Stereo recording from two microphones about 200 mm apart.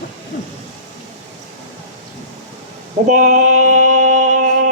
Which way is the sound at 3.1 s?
40° right (ahead or behind).